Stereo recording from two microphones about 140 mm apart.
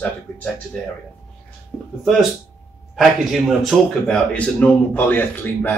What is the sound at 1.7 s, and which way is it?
Speech, centre (ahead or behind).